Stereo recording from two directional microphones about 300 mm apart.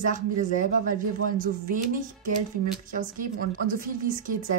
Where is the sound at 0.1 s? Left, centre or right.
Right.